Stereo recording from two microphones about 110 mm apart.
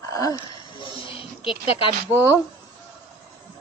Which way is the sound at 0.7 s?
50° left (ahead or behind).